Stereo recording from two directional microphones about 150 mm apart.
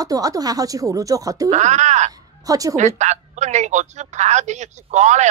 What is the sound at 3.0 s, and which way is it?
Speech, 50° right (ahead or behind).